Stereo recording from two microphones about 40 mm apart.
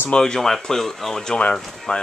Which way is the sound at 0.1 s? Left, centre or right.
Centre.